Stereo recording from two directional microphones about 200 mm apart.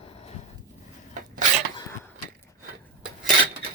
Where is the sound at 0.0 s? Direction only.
30° left (ahead or behind).